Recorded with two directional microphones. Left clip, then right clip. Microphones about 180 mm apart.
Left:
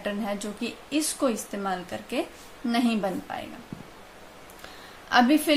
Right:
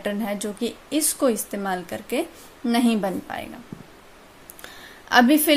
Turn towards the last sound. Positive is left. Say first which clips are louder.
# right 4 dB
turn(degrees=-45)  # may be behind; listen again after turning